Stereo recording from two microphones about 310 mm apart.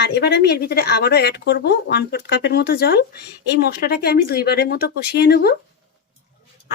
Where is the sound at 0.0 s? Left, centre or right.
Left.